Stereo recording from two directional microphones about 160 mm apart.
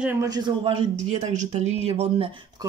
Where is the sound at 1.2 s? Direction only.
45° right (ahead or behind).